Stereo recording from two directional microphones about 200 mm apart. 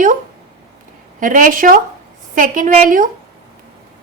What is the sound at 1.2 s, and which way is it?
Speech, 45° right (ahead or behind).